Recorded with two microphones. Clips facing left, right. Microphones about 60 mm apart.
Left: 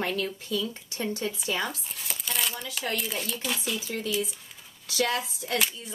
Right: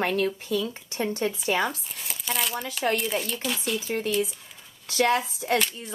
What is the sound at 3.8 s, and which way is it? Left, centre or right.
Speech, right.